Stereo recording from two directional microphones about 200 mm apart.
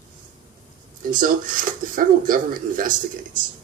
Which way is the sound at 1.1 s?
40° right (ahead or behind).